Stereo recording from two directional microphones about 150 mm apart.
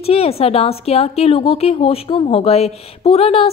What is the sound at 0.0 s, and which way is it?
A woman's voice, 40° left (ahead or behind).